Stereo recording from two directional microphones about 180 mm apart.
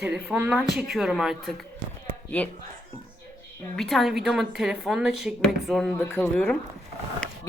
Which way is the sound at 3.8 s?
Centre (ahead or behind).